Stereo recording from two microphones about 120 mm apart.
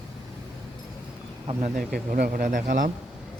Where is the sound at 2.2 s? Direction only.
90° right.